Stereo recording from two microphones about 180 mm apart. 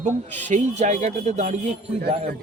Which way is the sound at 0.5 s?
40° right (ahead or behind).